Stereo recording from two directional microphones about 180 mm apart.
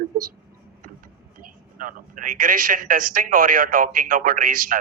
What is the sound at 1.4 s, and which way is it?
A man's voice, 50° right (ahead or behind).